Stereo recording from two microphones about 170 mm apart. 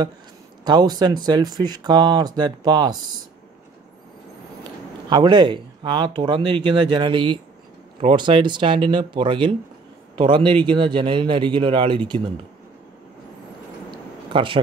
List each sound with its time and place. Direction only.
0.7 s speech: 25° right (ahead or behind)
5.1 s speech: 25° right (ahead or behind)
13.8 s a sound: 30° right (ahead or behind)